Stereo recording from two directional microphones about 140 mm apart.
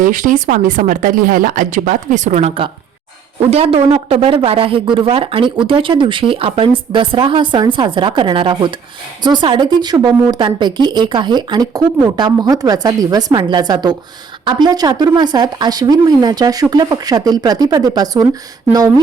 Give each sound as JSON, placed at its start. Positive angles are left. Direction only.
{"t": 0.0, "sound": "speech", "side_deg": -70}